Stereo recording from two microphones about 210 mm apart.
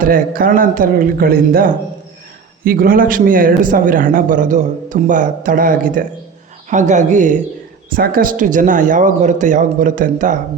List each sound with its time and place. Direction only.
0.0 s speech: 40° right (ahead or behind)